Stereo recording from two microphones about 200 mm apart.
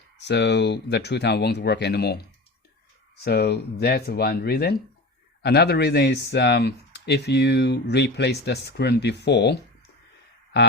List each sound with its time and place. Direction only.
0.2 s speech: 55° left (ahead or behind)
3.2 s speech: 55° left (ahead or behind)